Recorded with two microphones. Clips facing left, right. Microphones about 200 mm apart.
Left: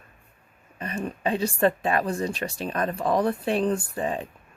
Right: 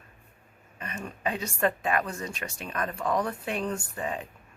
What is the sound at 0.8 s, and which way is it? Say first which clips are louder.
Speech: left 6 dB; 35° left (ahead or behind).